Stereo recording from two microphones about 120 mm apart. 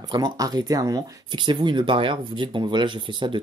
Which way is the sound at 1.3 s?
40° right (ahead or behind).